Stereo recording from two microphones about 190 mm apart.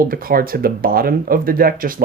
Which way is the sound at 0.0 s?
50° right (ahead or behind).